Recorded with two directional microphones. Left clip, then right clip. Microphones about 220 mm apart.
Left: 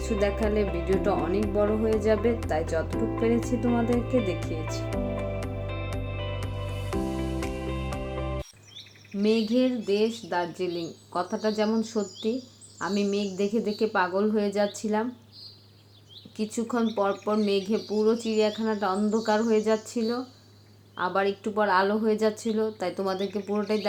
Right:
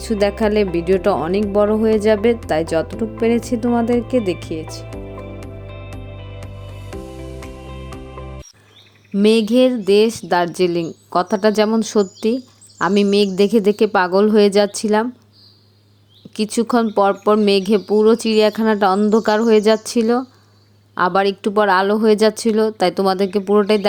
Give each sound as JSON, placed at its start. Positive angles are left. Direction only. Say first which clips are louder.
{"t": 0.0, "sound": "speech", "louder": "right 9 dB", "side_deg": -50}
{"t": 9.1, "sound": "speech", "louder": "right 11 dB", "side_deg": -50}
{"t": 16.3, "sound": "speech", "louder": "right 12 dB", "side_deg": -40}